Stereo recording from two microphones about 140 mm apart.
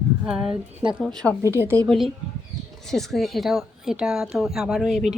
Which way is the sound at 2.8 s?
Centre (ahead or behind).